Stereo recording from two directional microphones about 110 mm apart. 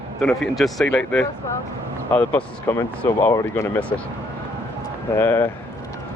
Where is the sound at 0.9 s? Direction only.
10° left (ahead or behind).